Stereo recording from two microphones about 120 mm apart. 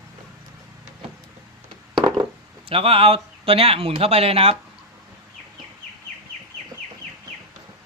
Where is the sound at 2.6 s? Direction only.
50° right (ahead or behind).